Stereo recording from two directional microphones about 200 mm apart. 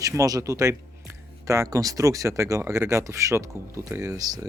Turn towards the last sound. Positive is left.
turn(degrees=-15)  # may be behind; listen again after turning